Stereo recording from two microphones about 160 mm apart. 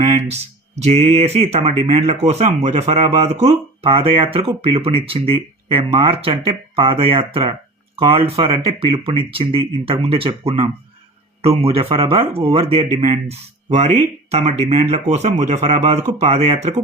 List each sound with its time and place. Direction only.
0.8 s speech: 40° right (ahead or behind)